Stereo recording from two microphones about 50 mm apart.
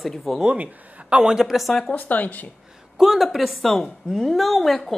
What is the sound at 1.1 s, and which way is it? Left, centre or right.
Speech, centre.